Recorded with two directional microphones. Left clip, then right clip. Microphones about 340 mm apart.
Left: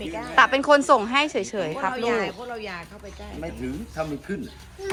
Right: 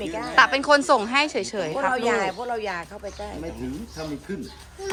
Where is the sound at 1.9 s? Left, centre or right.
Right.